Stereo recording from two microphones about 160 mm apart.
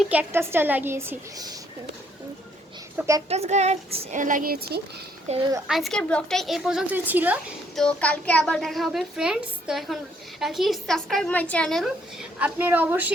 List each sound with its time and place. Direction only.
0.0 s a woman's voice: 10° right (ahead or behind)
3.2 s speech: 40° right (ahead or behind); by 4.8 s 75° right (ahead or behind)
5.3 s speech: 45° right (ahead or behind)
5.6 s a child's voice: centre (ahead or behind)
7.8 s a child's voice: 5° left (ahead or behind)
12.4 s a woman's voice: 10° right (ahead or behind)